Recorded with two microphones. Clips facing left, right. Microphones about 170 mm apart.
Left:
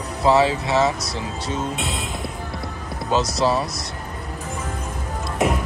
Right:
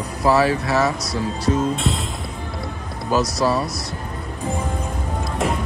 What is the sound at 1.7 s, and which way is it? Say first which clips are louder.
Music: right 4 dB; centre (ahead or behind).